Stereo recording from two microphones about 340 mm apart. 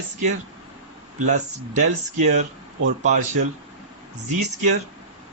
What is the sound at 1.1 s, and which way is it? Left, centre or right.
A man's voice, right.